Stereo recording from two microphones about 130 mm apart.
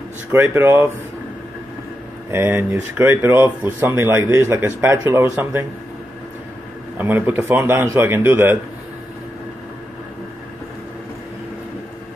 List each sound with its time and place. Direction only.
0.3 s a man's voice: 15° right (ahead or behind)
2.3 s a man's voice: 15° right (ahead or behind)
7.0 s a man's voice: 15° right (ahead or behind)